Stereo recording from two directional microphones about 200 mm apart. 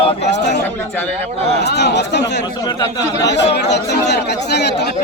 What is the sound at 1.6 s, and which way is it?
Speech, 55° left (ahead or behind).